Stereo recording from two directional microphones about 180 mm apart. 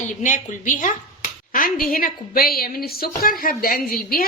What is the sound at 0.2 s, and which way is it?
A woman's voice, 45° left (ahead or behind).